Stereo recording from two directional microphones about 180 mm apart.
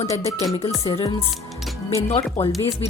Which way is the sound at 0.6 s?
30° left (ahead or behind).